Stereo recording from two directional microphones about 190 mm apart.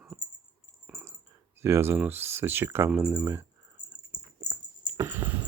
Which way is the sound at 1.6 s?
15° right (ahead or behind).